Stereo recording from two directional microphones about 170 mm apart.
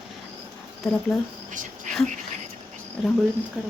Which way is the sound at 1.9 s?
45° right (ahead or behind).